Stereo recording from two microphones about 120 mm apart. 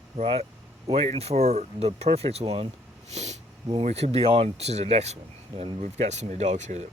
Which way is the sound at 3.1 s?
70° right (ahead or behind).